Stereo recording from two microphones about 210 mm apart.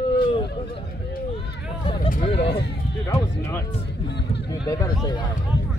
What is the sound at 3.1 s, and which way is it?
Music, 15° left (ahead or behind).